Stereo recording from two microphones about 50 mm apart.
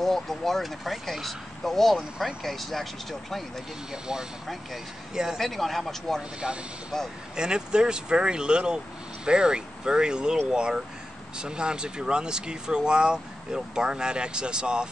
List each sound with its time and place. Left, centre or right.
0.0 s speech: centre
3.9 s speech: centre
5.4 s speech: centre
6.4 s speech: centre